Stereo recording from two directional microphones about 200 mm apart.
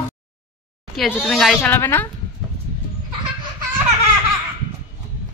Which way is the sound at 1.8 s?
10° left (ahead or behind).